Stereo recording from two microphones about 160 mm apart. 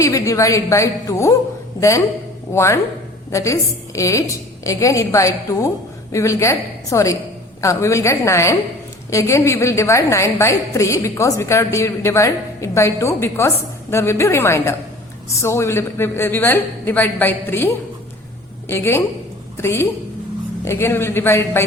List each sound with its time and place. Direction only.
0.0 s a woman's voice: 20° left (ahead or behind)
2.5 s a woman's voice: 15° left (ahead or behind)
18.7 s a woman's voice: 15° left (ahead or behind)